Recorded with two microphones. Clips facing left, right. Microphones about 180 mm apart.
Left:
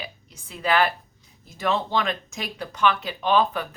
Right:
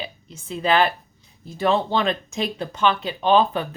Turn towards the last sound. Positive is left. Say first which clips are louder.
# right 3 dB
turn(degrees=-25)  # may be behind; listen again after turning